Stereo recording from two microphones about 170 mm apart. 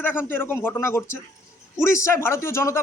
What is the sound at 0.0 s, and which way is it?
Speech, 10° left (ahead or behind).